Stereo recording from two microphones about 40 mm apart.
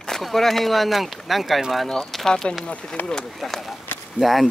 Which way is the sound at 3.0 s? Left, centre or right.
Left.